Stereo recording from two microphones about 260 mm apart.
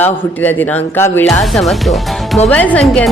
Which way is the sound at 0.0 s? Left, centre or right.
Centre.